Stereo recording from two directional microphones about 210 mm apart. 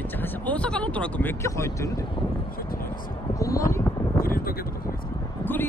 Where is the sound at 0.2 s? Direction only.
5° left (ahead or behind).